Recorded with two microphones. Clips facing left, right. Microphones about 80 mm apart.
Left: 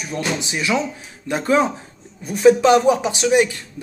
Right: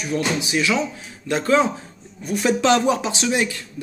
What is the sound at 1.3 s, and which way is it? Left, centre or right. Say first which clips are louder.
Speech: even; left.